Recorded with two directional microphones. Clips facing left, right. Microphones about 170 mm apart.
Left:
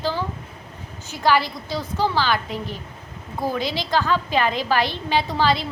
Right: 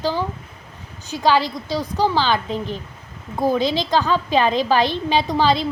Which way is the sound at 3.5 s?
20° right (ahead or behind).